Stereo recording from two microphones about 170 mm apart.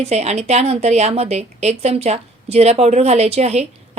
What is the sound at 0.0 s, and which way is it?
A woman's voice, 40° right (ahead or behind).